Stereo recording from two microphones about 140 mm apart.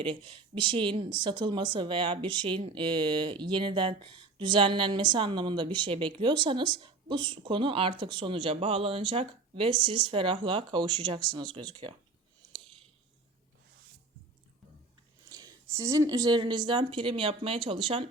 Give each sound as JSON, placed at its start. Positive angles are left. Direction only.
{"t": 0.0, "sound": "speech", "side_deg": -40}
{"t": 15.3, "sound": "speech", "side_deg": -25}